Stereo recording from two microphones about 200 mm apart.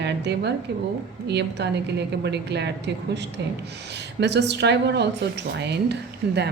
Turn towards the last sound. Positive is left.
turn(degrees=-55)  # may be behind; listen again after turning